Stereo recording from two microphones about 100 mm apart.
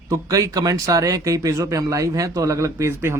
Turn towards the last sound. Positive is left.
turn(degrees=-25)  # may be behind; listen again after turning